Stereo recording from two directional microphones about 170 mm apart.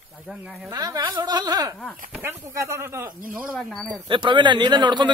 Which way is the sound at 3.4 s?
5° right (ahead or behind).